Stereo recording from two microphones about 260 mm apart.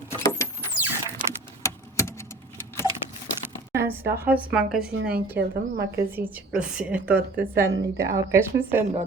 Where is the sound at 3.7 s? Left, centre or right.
Centre.